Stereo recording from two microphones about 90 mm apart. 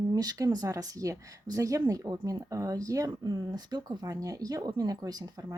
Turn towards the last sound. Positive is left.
turn(degrees=-45)  # may be behind; listen again after turning